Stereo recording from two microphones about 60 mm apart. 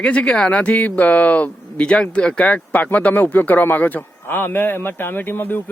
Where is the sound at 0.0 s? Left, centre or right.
Centre.